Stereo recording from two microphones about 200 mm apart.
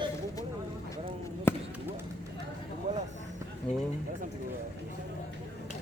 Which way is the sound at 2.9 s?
35° right (ahead or behind).